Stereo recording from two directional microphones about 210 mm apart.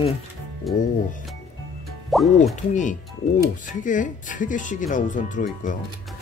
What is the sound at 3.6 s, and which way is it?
Speech, 40° left (ahead or behind).